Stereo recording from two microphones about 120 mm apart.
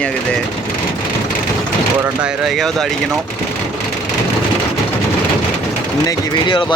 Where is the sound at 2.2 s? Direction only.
Centre (ahead or behind).